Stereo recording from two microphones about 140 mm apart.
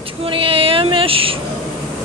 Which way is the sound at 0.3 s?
40° right (ahead or behind).